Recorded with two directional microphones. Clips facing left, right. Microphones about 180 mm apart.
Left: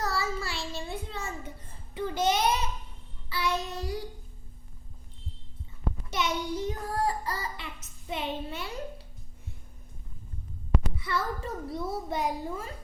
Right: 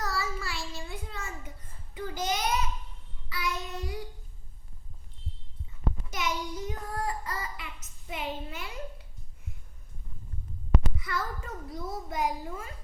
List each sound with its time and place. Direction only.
0.0 s child singing: 25° left (ahead or behind)
0.8 s a sound: 30° left (ahead or behind)
1.9 s a child's voice: 25° left (ahead or behind)
3.2 s child singing: 30° left (ahead or behind)
6.1 s a child's voice: 30° left (ahead or behind)
10.9 s a child's voice: 30° left (ahead or behind)